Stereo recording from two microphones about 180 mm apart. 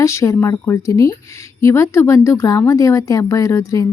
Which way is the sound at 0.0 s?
15° left (ahead or behind).